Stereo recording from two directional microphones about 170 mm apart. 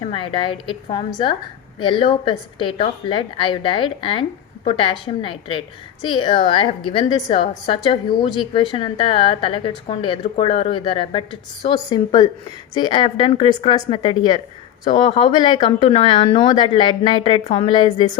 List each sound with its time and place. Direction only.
0.0 s a woman's voice: 30° left (ahead or behind)